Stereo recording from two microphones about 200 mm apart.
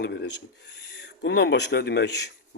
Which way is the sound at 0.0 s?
55° left (ahead or behind).